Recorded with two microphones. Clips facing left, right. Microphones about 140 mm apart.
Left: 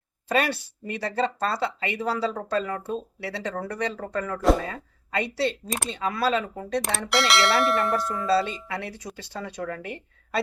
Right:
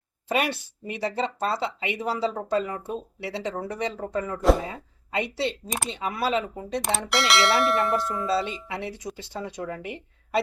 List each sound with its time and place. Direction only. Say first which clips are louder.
0.3 s speech: left 1 dB; 15° right (ahead or behind)
7.1 s bell: left 1 dB; centre (ahead or behind)
8.4 s a woman's voice: left 2 dB; 15° right (ahead or behind)